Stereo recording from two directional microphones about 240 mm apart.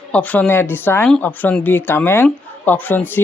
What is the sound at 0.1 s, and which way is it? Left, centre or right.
Speech, centre.